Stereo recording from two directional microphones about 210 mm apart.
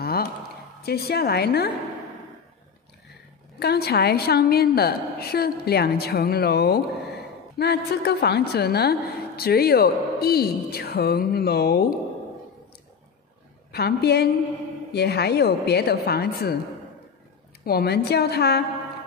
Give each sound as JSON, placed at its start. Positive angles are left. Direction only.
{"t": 0.0, "sound": "a sound", "side_deg": 45}
{"t": 0.8, "sound": "a woman's voice", "side_deg": 50}
{"t": 3.5, "sound": "a woman's voice", "side_deg": 50}
{"t": 13.7, "sound": "a woman's voice", "side_deg": 50}
{"t": 17.6, "sound": "a woman's voice", "side_deg": 50}